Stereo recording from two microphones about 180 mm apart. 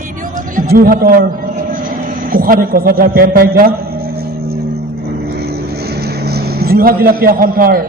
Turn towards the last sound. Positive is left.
turn(degrees=-55)  # may be behind; listen again after turning